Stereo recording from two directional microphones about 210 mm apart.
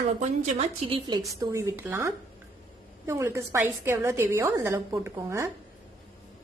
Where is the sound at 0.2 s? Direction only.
35° right (ahead or behind); by 2.0 s 10° right (ahead or behind).